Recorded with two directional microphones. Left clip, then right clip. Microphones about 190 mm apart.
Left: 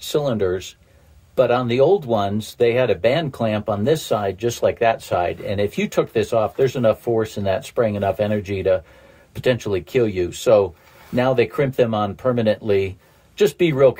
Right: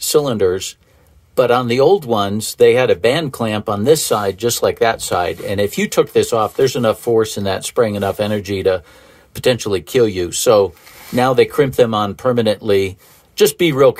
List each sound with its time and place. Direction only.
0.1 s speech: 30° right (ahead or behind)